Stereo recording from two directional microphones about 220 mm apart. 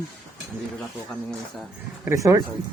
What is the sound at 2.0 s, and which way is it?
Speech, 15° right (ahead or behind).